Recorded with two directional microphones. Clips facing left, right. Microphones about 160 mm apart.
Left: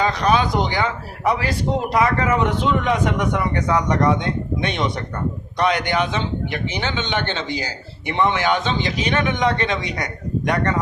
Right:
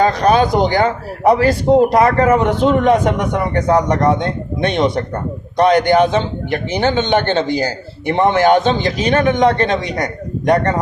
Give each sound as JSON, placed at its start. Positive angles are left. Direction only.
{"t": 0.0, "sound": "speech", "side_deg": -45}